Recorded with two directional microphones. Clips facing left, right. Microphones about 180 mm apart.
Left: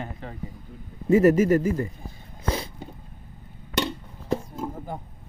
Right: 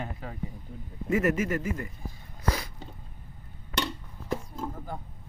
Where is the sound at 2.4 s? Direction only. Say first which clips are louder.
Left 2 dB; 25° left (ahead or behind).